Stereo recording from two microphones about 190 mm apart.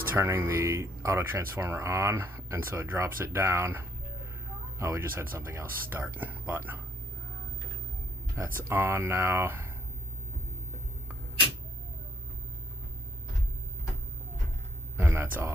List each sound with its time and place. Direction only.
0.1 s speech: 15° right (ahead or behind)
8.5 s speech: 10° right (ahead or behind)
14.9 s speech: 10° right (ahead or behind)